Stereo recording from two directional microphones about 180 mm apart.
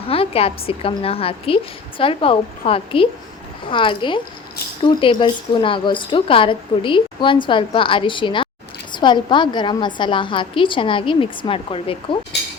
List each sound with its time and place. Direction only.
0.1 s a woman's voice: 30° left (ahead or behind)